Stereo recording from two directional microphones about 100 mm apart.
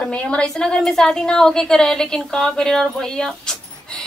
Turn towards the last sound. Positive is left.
turn(degrees=5)  # may be behind; listen again after turning